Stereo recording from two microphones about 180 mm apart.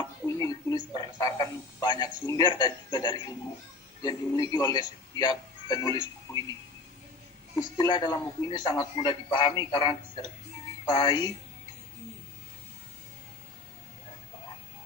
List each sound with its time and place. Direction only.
0.3 s a man's voice: 20° left (ahead or behind)